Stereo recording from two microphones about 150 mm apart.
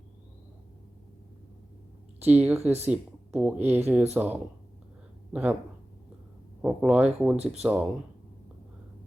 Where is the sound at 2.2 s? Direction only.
10° right (ahead or behind).